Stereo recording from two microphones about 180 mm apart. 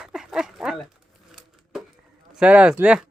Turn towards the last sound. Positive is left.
turn(degrees=-5)  # may be behind; listen again after turning